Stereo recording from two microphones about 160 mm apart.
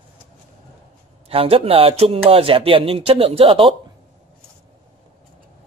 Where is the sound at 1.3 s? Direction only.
35° right (ahead or behind).